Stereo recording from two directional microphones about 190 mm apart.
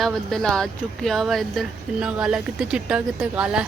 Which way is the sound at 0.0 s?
Centre (ahead or behind).